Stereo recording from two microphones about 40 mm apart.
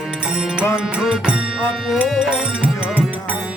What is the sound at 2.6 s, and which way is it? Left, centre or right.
Music, right.